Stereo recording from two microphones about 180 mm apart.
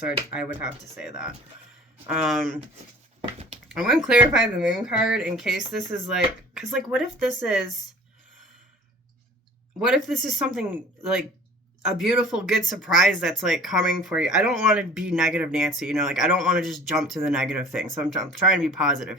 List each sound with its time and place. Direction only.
0.3 s speech: 5° right (ahead or behind)
3.7 s speech: centre (ahead or behind)
9.8 s speech: centre (ahead or behind)